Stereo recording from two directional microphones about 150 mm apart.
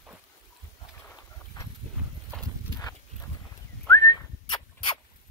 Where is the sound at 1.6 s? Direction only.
30° left (ahead or behind).